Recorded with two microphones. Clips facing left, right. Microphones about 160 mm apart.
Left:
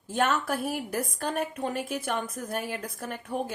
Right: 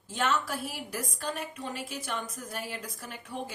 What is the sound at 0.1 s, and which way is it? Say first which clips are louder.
A woman's voice: left 4 dB; 50° left (ahead or behind).